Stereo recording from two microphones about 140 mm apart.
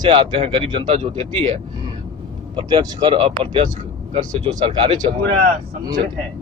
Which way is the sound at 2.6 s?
30° right (ahead or behind).